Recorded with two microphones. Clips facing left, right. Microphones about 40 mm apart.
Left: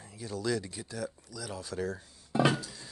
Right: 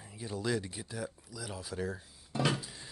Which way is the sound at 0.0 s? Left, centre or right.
Centre.